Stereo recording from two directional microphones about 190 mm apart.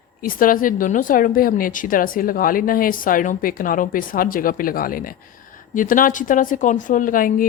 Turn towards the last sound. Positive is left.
turn(degrees=45)  # may be behind; listen again after turning